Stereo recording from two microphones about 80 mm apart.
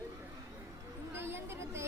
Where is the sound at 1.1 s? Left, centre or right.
Right.